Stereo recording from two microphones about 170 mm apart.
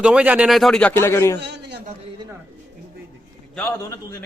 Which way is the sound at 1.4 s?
80° right.